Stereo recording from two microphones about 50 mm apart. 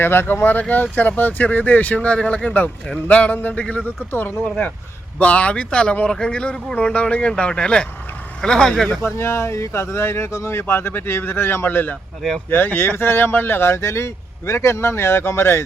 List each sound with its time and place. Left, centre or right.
0.0 s speech: left
4.1 s speech: left
4.4 s speech: left
9.0 s speech: left